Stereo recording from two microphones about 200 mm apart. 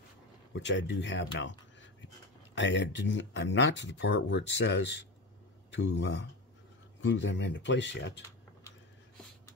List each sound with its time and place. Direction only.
0.5 s speech: 65° left (ahead or behind)